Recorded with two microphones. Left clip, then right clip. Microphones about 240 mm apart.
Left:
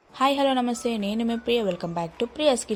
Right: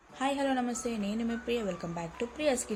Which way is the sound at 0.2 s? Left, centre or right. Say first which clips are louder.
Left 9 dB; left.